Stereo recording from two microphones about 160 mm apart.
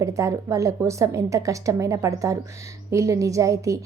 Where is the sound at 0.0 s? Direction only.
20° right (ahead or behind).